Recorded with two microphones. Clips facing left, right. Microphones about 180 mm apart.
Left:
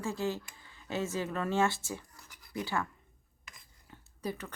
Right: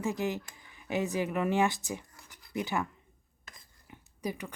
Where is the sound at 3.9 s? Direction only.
15° right (ahead or behind).